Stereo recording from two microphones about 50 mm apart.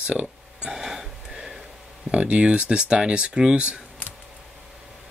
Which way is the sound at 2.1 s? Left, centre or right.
Right.